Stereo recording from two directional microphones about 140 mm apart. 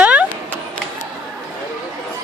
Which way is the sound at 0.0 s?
10° right (ahead or behind).